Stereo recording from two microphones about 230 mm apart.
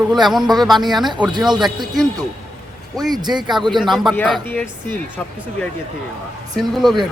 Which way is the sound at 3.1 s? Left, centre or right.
Centre.